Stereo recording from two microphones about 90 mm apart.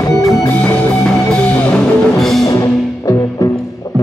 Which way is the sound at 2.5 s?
40° left (ahead or behind).